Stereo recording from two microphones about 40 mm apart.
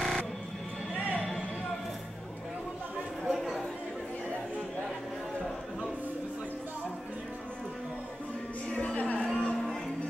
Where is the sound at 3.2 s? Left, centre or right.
Centre.